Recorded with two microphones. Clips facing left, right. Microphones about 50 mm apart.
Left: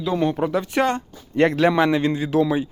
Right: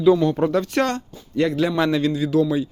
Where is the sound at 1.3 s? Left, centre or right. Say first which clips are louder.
Left 3 dB; left.